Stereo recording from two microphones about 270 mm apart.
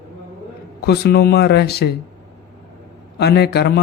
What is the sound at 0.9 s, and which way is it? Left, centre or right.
A man's voice, left.